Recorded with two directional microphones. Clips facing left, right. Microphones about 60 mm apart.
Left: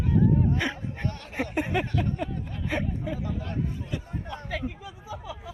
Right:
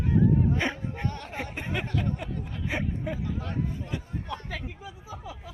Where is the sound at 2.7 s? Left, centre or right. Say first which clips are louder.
Left 2 dB; centre.